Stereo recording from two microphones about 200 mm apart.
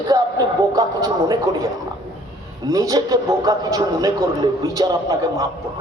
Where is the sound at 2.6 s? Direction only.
15° right (ahead or behind).